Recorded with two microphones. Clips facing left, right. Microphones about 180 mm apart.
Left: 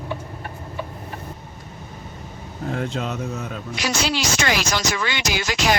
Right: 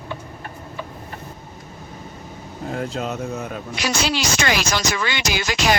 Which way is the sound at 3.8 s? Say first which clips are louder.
Right 1 dB; 70° right (ahead or behind).